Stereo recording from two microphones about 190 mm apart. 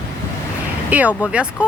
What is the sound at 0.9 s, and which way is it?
Speech, 10° right (ahead or behind).